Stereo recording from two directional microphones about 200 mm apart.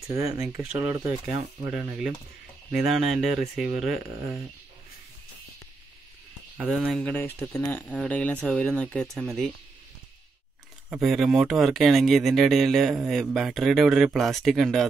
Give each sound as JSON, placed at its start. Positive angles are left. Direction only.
{"t": 0.1, "sound": "speech", "side_deg": -15}
{"t": 6.6, "sound": "speech", "side_deg": -5}
{"t": 10.9, "sound": "speech", "side_deg": 0}